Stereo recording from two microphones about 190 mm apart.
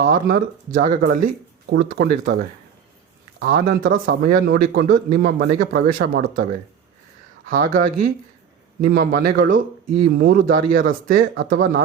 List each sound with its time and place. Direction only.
0.0 s a man's voice: 50° right (ahead or behind)
7.6 s a man's voice: 45° right (ahead or behind)